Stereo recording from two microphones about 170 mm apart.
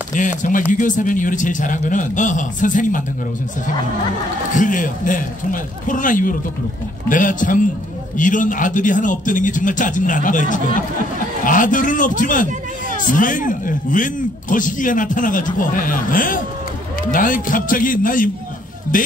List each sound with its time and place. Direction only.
0.1 s speech: 50° left (ahead or behind)
4.5 s speech: 50° left (ahead or behind)